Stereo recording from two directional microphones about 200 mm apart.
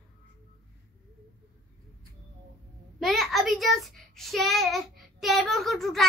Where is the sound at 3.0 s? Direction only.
Centre (ahead or behind).